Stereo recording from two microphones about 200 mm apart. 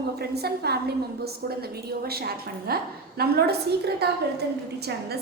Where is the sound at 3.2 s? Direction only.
55° right (ahead or behind).